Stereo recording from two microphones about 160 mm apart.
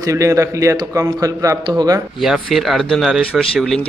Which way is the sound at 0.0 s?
20° right (ahead or behind).